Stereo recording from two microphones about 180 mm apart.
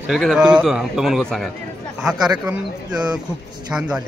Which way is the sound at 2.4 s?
10° right (ahead or behind).